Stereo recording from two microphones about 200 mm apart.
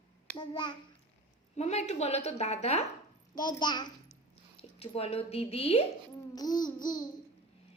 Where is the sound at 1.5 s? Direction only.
35° left (ahead or behind).